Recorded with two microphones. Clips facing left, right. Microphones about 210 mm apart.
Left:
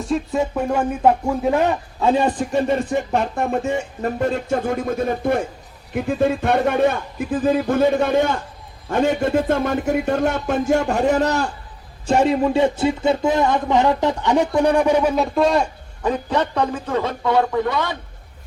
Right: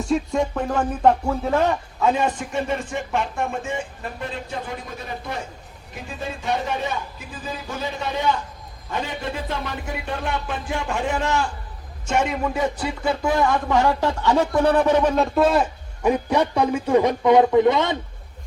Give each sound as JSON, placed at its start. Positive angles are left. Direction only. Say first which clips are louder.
{"t": 0.0, "sound": "speech", "louder": "left 1 dB", "side_deg": 0}
{"t": 2.0, "sound": "a man's voice", "louder": "left 4 dB", "side_deg": 35}
{"t": 8.9, "sound": "music", "louder": "left 10 dB", "side_deg": 50}
{"t": 12.0, "sound": "speech", "louder": "left 6 dB", "side_deg": 35}